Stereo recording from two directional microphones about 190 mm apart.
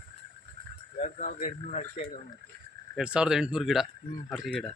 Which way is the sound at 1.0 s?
40° left (ahead or behind).